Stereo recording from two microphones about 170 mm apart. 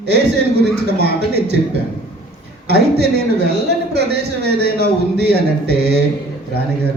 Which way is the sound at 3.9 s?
75° right (ahead or behind).